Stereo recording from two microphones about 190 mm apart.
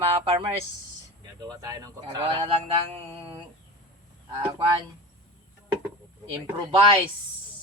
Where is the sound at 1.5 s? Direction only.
20° right (ahead or behind).